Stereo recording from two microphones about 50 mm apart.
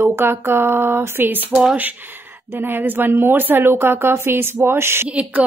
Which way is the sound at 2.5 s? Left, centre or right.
Right.